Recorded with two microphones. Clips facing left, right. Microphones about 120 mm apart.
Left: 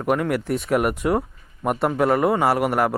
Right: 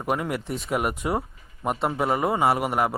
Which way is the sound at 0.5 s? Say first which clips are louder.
Left 5 dB; centre (ahead or behind).